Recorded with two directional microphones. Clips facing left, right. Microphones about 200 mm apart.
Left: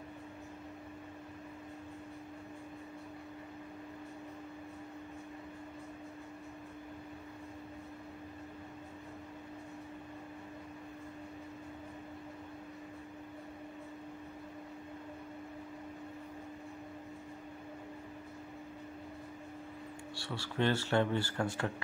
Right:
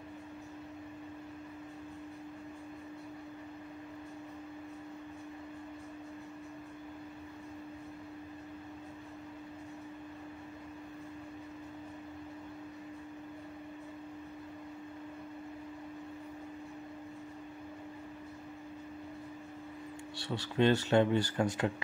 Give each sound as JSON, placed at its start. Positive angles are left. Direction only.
{"t": 20.2, "sound": "speech", "side_deg": -20}